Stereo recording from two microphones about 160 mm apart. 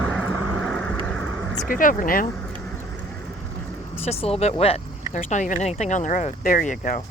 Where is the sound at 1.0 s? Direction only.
5° left (ahead or behind).